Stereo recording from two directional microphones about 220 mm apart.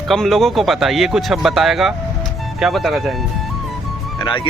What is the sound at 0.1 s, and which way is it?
Speech, centre (ahead or behind).